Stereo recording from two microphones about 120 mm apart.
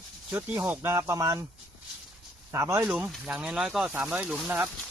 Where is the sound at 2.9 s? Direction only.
10° right (ahead or behind).